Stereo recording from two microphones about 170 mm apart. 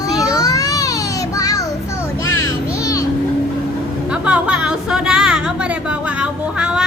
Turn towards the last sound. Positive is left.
turn(degrees=-5)  # may be behind; listen again after turning